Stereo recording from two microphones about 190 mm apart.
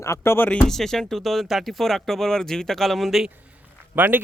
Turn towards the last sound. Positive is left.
turn(degrees=-10)  # may be behind; listen again after turning